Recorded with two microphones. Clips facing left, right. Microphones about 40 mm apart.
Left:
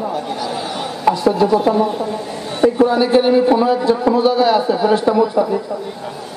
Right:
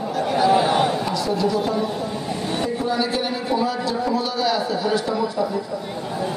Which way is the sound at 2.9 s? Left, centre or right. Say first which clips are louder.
Left 9 dB; left.